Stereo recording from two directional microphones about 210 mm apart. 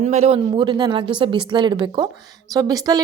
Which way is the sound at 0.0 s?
30° right (ahead or behind).